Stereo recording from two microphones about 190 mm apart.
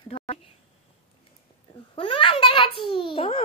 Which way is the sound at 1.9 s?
25° left (ahead or behind).